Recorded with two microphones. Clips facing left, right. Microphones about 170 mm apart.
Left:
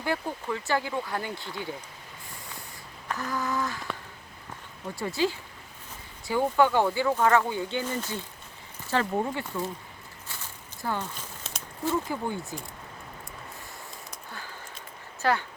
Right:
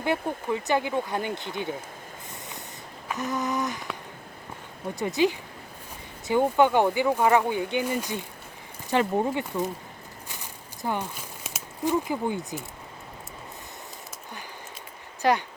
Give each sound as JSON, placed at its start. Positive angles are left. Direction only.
{"t": 0.0, "sound": "speech", "side_deg": -20}
{"t": 3.1, "sound": "speech", "side_deg": -20}
{"t": 4.9, "sound": "speech", "side_deg": -20}
{"t": 10.2, "sound": "a sound", "side_deg": -15}
{"t": 15.2, "sound": "speech", "side_deg": -15}